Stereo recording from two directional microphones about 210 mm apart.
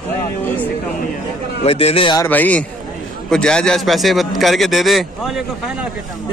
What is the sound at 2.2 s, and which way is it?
A man's voice, 10° left (ahead or behind).